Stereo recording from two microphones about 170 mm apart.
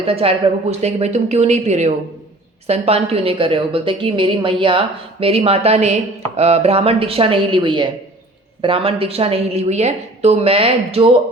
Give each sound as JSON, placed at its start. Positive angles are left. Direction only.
{"t": 0.0, "sound": "a woman's voice", "side_deg": -35}